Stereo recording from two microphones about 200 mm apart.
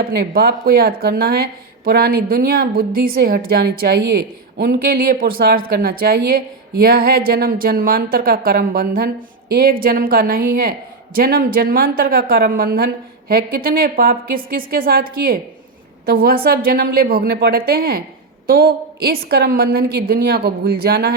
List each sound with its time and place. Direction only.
0.0 s speech: 50° right (ahead or behind)